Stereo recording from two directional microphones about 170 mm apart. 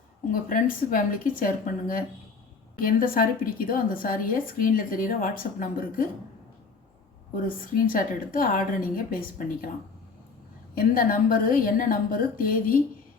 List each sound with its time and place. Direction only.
0.3 s a woman's voice: 55° left (ahead or behind)
7.4 s a woman's voice: 55° left (ahead or behind)
10.8 s a woman's voice: 55° left (ahead or behind)